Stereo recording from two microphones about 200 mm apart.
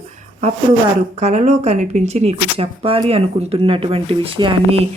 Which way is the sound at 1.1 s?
35° right (ahead or behind).